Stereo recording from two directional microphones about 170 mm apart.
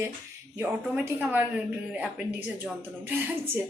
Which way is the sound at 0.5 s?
15° right (ahead or behind).